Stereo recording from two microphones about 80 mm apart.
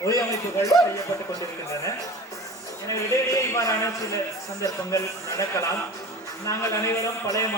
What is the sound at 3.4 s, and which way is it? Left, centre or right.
A man's voice, left.